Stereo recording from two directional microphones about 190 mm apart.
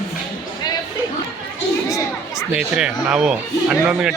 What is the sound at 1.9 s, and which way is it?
Chatter, 15° left (ahead or behind).